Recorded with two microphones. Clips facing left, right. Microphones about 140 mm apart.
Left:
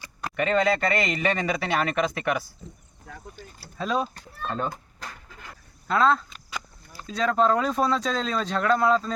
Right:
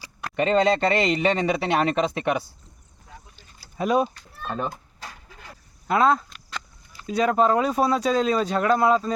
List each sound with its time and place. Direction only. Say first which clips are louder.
0.3 s speech: right 3 dB; 30° right (ahead or behind)
3.1 s vehicle: left 6 dB; 65° left (ahead or behind)
3.8 s speech: right 5 dB; 15° right (ahead or behind)
5.9 s speech: right 2 dB; 10° right (ahead or behind)